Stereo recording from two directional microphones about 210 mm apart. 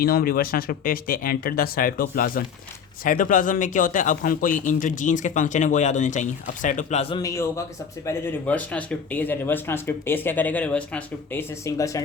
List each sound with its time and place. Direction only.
0.0 s a man's voice: 45° left (ahead or behind); by 7.2 s 30° left (ahead or behind)
7.2 s speech: 15° left (ahead or behind)